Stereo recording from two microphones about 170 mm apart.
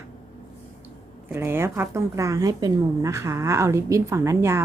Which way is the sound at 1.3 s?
15° right (ahead or behind).